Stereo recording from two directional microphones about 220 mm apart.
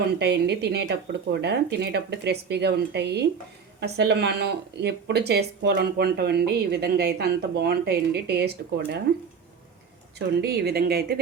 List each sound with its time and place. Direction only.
0.2 s speech: 50° right (ahead or behind)
10.2 s speech: 50° right (ahead or behind)